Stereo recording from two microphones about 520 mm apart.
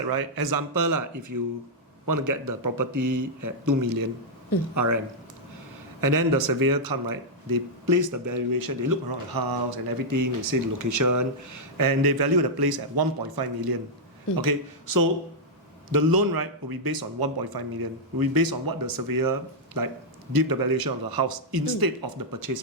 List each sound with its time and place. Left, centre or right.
0.1 s a man's voice: right
6.0 s a man's voice: right